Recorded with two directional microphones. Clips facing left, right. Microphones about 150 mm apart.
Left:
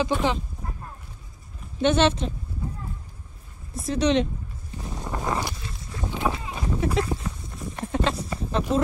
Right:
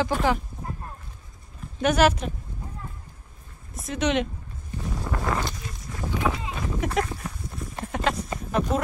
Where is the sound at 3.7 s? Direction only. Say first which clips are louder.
Left 3 dB; 30° left (ahead or behind).